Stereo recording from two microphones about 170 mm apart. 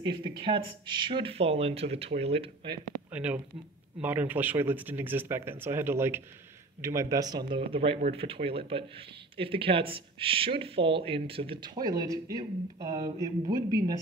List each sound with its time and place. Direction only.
0.0 s speech: 25° right (ahead or behind)
3.1 s speech: 10° right (ahead or behind)